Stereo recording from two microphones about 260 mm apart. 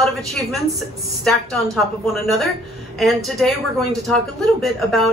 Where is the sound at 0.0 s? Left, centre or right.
Centre.